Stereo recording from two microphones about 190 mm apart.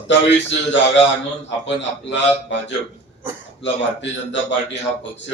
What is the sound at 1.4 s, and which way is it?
A man's voice, 70° left (ahead or behind).